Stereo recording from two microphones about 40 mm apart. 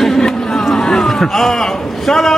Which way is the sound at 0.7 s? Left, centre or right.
Centre.